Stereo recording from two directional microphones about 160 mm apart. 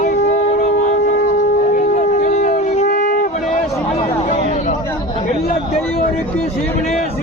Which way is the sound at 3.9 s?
45° left (ahead or behind).